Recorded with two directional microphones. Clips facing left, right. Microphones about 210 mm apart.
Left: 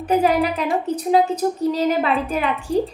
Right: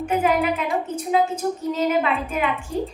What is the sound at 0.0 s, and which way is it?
A woman's voice, 35° left (ahead or behind).